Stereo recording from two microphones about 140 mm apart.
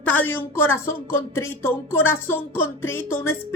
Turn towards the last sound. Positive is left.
turn(degrees=15)  # may be behind; listen again after turning